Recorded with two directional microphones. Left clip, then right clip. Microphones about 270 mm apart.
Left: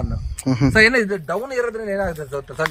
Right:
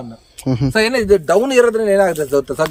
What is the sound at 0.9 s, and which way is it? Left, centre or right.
Speech, right.